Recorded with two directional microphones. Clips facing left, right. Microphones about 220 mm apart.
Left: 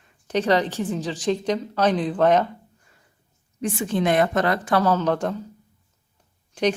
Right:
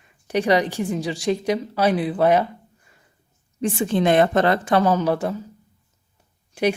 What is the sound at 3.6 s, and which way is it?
A woman's voice, 30° right (ahead or behind).